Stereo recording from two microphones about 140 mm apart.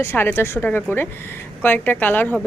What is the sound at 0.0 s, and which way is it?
Speech, 15° left (ahead or behind).